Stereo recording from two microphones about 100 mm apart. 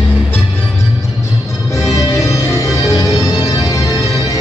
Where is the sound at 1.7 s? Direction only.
30° left (ahead or behind).